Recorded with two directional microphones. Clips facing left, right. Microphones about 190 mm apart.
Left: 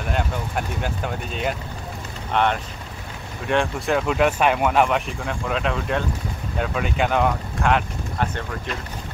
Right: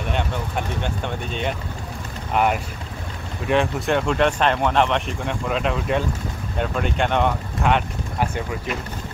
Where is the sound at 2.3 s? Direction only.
10° right (ahead or behind).